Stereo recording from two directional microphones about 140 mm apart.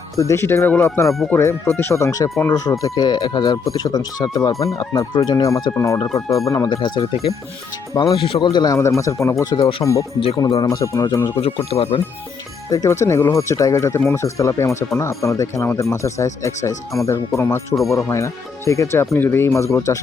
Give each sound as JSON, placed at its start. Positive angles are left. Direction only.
{"t": 0.2, "sound": "speech", "side_deg": 20}
{"t": 1.0, "sound": "speech", "side_deg": 0}
{"t": 1.3, "sound": "speech", "side_deg": 20}
{"t": 8.4, "sound": "speech", "side_deg": 25}
{"t": 11.3, "sound": "speech", "side_deg": 45}
{"t": 12.7, "sound": "speech", "side_deg": 25}